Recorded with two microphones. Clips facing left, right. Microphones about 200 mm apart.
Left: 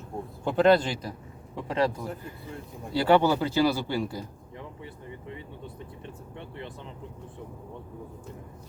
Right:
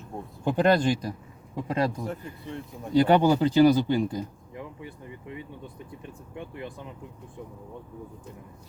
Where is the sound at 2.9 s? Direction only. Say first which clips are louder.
Right 2 dB; 15° right (ahead or behind).